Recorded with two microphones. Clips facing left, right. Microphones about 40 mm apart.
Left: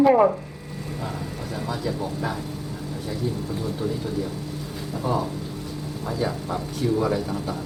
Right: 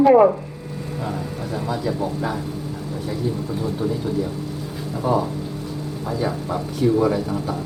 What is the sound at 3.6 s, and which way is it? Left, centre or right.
Speech, centre.